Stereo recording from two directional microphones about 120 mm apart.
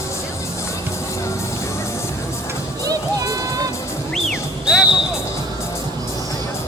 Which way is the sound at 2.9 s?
30° right (ahead or behind).